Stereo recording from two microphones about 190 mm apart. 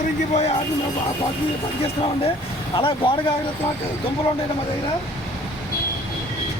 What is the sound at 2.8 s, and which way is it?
Speech, 25° left (ahead or behind).